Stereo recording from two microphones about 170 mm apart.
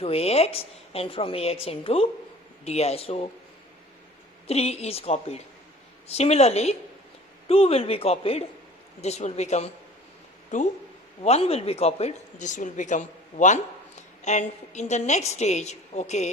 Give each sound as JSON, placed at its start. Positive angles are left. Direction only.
{"t": 0.0, "sound": "speech", "side_deg": 35}
{"t": 4.4, "sound": "a woman's voice", "side_deg": 40}